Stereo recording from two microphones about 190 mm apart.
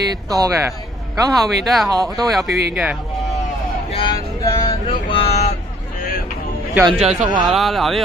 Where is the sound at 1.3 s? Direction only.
Centre (ahead or behind).